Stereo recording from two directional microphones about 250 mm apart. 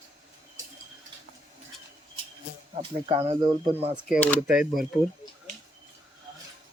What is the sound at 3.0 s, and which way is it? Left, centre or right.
Speech, right.